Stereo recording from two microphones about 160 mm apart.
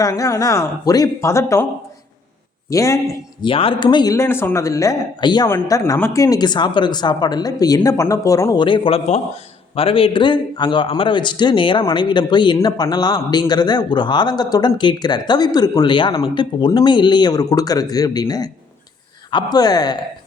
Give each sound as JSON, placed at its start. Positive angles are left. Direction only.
{"t": 0.0, "sound": "speech", "side_deg": 20}
{"t": 2.6, "sound": "speech", "side_deg": 20}
{"t": 3.4, "sound": "speech", "side_deg": 35}
{"t": 8.6, "sound": "a man's voice", "side_deg": 30}